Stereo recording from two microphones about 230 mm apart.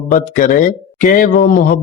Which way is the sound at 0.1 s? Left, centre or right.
Left.